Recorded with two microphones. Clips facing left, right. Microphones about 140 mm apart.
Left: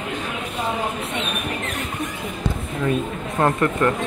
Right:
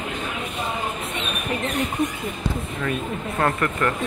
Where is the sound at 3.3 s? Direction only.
20° left (ahead or behind).